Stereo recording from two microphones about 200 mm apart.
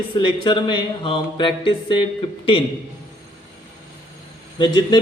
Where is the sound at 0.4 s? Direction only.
25° left (ahead or behind).